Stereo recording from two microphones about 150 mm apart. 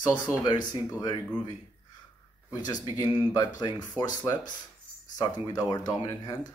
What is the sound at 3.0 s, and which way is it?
Speech, 25° left (ahead or behind).